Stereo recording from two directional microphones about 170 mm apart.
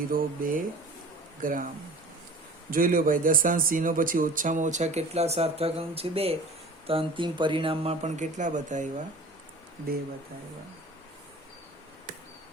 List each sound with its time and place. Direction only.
0.1 s a man's voice: 55° right (ahead or behind)